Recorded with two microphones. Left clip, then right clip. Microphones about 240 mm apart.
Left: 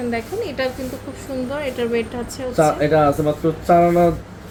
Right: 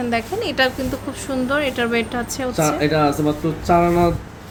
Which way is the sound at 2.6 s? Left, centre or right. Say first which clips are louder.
Left 3 dB; centre.